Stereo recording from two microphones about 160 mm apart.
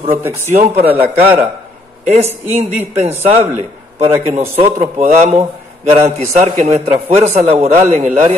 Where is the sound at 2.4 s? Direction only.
45° right (ahead or behind).